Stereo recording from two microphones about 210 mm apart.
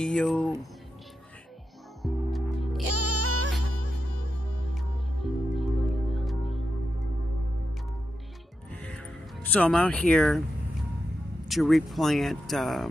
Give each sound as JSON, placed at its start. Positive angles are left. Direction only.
{"t": 0.0, "sound": "speech", "side_deg": 0}
{"t": 2.0, "sound": "music", "side_deg": 0}
{"t": 2.9, "sound": "music", "side_deg": -90}
{"t": 4.7, "sound": "music", "side_deg": 0}
{"t": 8.7, "sound": "music", "side_deg": 5}
{"t": 11.4, "sound": "speech", "side_deg": 0}